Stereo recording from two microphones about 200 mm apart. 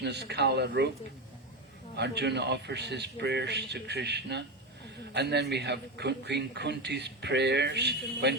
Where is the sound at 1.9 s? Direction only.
55° right (ahead or behind).